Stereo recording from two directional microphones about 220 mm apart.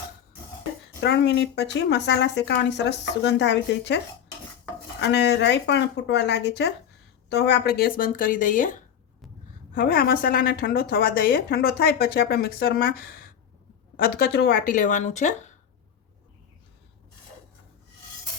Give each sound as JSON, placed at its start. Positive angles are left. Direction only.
{"t": 1.0, "sound": "a woman's voice", "side_deg": 50}
{"t": 9.7, "sound": "a woman's voice", "side_deg": 40}